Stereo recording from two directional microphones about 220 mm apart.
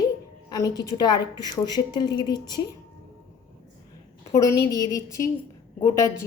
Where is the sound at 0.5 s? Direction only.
15° left (ahead or behind).